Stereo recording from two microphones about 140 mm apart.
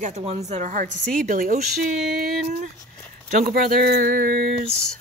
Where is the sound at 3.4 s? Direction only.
90° right.